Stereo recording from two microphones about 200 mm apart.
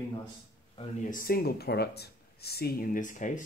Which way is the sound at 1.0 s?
45° left (ahead or behind).